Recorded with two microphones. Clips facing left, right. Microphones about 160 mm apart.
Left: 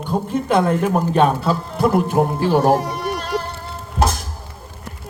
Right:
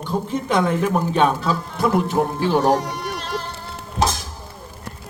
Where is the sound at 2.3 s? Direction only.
45° left (ahead or behind).